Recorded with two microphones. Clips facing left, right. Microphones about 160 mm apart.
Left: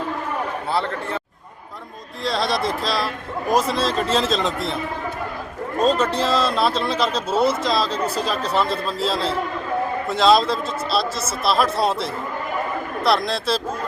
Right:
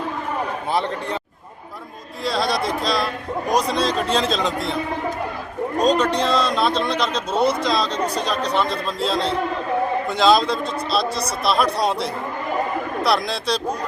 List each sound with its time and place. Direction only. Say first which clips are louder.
0.7 s a man's voice: right 1 dB; 15° right (ahead or behind)
2.2 s a man's voice: even; centre (ahead or behind)
5.8 s a man's voice: even; 5° left (ahead or behind)